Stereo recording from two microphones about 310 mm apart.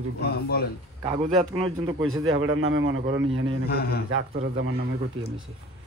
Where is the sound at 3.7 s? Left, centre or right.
Left.